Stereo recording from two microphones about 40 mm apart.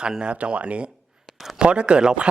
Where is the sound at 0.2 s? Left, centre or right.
Right.